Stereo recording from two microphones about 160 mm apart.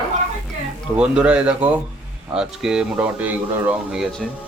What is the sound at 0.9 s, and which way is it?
Speech, 5° right (ahead or behind).